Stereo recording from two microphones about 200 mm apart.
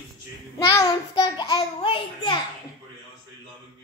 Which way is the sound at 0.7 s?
20° left (ahead or behind).